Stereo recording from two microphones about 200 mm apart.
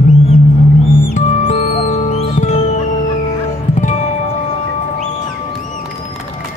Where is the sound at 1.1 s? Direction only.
35° left (ahead or behind).